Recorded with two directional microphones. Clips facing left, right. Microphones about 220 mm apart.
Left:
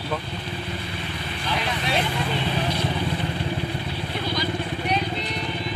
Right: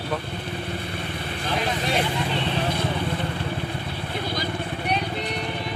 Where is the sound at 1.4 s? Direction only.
50° right (ahead or behind).